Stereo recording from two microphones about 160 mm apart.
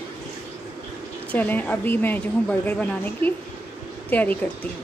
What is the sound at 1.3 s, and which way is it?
A woman's voice, 10° left (ahead or behind).